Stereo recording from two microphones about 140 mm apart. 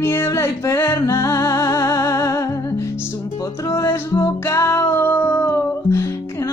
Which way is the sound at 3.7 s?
20° left (ahead or behind).